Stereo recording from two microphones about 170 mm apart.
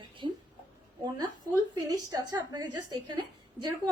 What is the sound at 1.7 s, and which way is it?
A woman's voice, 20° right (ahead or behind).